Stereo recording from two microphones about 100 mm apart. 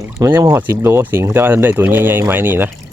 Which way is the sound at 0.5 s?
20° right (ahead or behind).